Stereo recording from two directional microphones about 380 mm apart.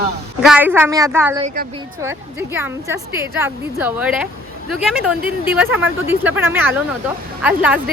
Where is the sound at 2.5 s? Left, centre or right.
Centre.